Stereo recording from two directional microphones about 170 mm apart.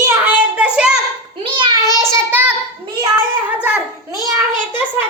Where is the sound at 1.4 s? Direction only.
30° right (ahead or behind).